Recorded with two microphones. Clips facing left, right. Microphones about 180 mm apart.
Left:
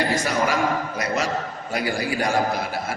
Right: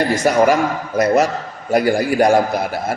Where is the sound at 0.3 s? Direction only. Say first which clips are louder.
Right 8 dB; 50° right (ahead or behind).